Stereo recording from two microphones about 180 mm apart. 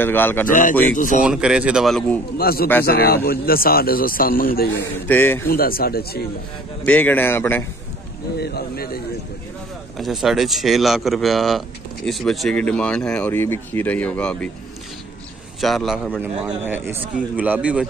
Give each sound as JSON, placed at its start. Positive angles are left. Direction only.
{"t": 0.0, "sound": "speech", "side_deg": 10}
{"t": 0.5, "sound": "speech", "side_deg": 45}
{"t": 1.2, "sound": "speech", "side_deg": -5}
{"t": 2.3, "sound": "a man's voice", "side_deg": 55}
{"t": 5.0, "sound": "speech", "side_deg": 10}
{"t": 5.5, "sound": "a man's voice", "side_deg": 55}
{"t": 6.8, "sound": "speech", "side_deg": 10}
{"t": 8.4, "sound": "a man's voice", "side_deg": 60}
{"t": 9.9, "sound": "speech", "side_deg": 0}
{"t": 15.6, "sound": "speech", "side_deg": 0}
{"t": 16.2, "sound": "speech", "side_deg": -10}